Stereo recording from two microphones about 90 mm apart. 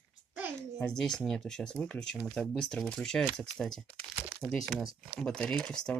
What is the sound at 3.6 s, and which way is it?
Crumpling, 5° left (ahead or behind).